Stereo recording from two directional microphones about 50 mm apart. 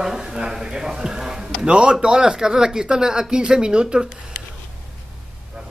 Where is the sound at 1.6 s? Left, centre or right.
Centre.